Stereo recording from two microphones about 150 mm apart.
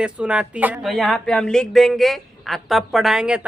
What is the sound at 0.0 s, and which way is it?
Speech, 5° right (ahead or behind).